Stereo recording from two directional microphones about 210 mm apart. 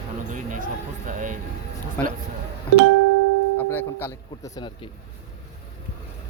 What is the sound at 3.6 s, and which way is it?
Speech, 10° left (ahead or behind).